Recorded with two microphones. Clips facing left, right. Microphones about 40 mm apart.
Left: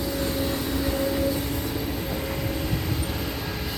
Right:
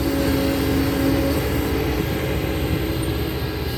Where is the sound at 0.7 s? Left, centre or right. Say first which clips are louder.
Right 6 dB; right.